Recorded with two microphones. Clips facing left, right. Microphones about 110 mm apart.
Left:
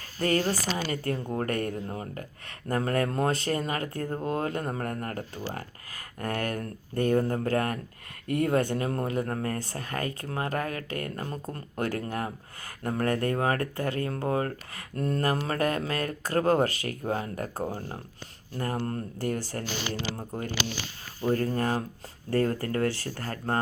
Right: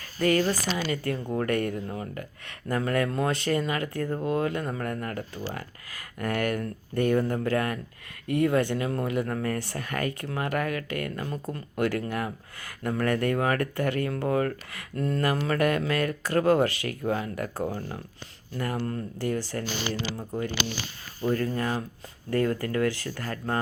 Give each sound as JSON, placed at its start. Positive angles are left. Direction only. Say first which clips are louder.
{"t": 0.2, "sound": "speech", "louder": "right 2 dB", "side_deg": 35}
{"t": 21.2, "sound": "speech", "louder": "even", "side_deg": 40}